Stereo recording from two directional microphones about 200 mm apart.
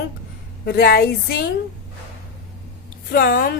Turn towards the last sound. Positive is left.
turn(degrees=45)  # may be behind; listen again after turning